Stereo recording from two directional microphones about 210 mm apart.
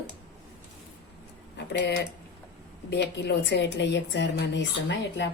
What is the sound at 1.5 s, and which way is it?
A woman's voice, 55° left (ahead or behind).